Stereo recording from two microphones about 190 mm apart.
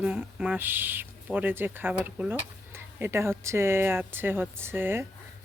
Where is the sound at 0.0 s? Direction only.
5° right (ahead or behind).